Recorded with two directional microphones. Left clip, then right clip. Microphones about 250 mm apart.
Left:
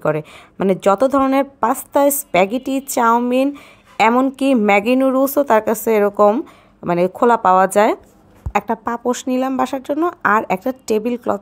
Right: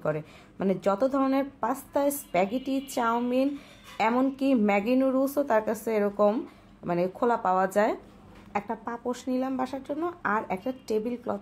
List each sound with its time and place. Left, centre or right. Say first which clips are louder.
0.0 s a woman's voice: left 11 dB; left